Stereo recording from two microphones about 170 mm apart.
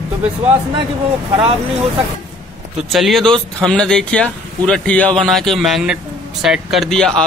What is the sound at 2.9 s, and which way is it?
Speech, centre (ahead or behind).